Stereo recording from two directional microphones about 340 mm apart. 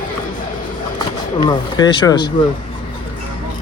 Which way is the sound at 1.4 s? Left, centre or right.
Centre.